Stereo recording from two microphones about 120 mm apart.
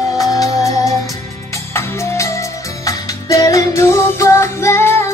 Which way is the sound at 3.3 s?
30° left (ahead or behind).